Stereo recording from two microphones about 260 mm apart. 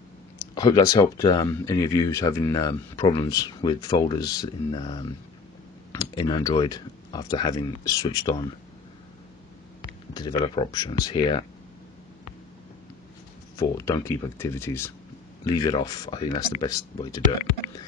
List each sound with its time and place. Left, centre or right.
0.6 s speech: centre
9.8 s speech: centre
13.6 s speech: centre